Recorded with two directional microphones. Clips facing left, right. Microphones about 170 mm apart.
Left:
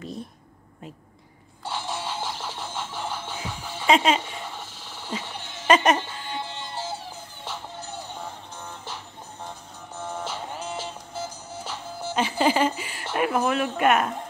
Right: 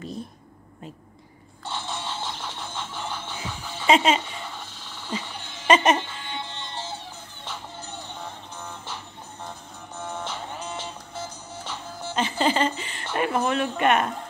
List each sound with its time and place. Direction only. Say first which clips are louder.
1.6 s a sound: left 2 dB; 10° left (ahead or behind)
5.1 s speech: right 1 dB; centre (ahead or behind)
5.7 s music: even; centre (ahead or behind)
9.9 s music: left 1 dB; 5° left (ahead or behind)